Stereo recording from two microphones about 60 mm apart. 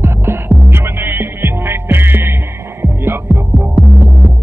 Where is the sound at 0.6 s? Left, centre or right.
Right.